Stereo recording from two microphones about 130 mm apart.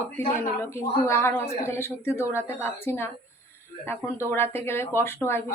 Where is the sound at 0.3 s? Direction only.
20° left (ahead or behind).